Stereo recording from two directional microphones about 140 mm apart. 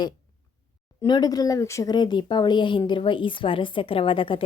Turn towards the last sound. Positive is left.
turn(degrees=40)  # may be behind; listen again after turning